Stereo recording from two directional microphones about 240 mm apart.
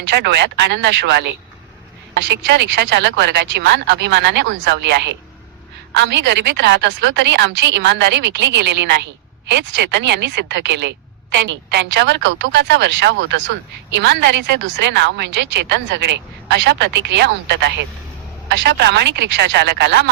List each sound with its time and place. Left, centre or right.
0.0 s speech: right